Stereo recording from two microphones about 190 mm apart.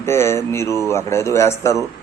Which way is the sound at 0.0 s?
15° left (ahead or behind).